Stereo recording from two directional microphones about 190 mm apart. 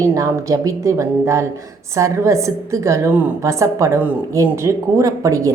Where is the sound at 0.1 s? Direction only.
15° right (ahead or behind).